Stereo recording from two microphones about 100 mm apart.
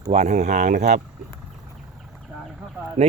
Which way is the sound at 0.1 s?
90° right.